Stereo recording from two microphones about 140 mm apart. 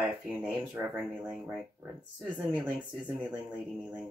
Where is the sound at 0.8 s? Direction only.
20° right (ahead or behind).